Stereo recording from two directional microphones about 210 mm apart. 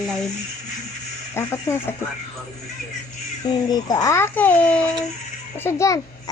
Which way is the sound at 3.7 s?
20° left (ahead or behind).